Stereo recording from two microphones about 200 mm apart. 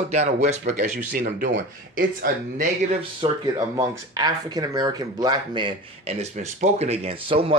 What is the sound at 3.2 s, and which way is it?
Speech, 20° right (ahead or behind).